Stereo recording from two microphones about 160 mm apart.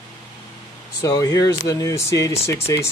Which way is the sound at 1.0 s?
20° left (ahead or behind).